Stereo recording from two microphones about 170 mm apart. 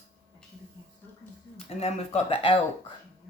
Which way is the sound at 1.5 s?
40° left (ahead or behind).